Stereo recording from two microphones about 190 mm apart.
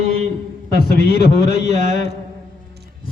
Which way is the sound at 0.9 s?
55° left (ahead or behind).